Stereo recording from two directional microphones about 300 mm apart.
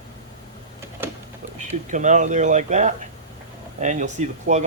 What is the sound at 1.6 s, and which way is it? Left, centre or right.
Speech, right.